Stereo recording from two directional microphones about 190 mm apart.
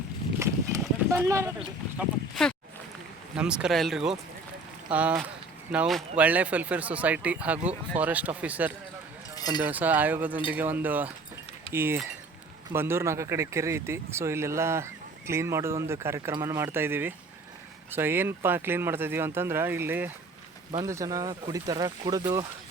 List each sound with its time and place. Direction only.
0.3 s a sound: 15° right (ahead or behind)
1.5 s speech: centre (ahead or behind)
9.3 s chink: 20° left (ahead or behind)
9.6 s speech: 10° right (ahead or behind)